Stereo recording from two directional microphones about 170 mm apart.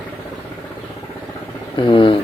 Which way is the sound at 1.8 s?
30° left (ahead or behind).